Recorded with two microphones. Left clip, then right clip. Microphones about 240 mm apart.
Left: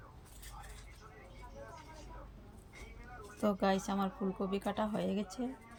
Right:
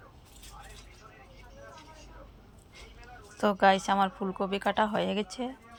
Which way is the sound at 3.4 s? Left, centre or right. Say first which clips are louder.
Right 10 dB; centre.